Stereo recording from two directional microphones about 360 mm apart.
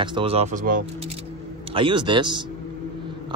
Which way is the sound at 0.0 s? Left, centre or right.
Centre.